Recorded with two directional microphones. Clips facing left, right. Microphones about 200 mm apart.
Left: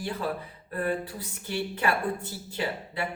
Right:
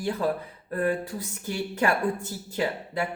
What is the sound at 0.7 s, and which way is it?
A woman's voice, 45° right (ahead or behind).